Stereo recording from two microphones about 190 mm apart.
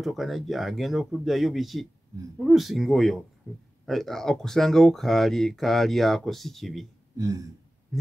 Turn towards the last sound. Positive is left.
turn(degrees=-15)  # may be behind; listen again after turning